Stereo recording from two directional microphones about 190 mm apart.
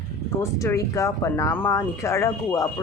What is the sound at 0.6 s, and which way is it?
Speech, 15° left (ahead or behind).